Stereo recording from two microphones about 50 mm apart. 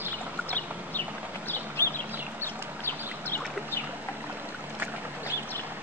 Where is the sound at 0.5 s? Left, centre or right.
Left.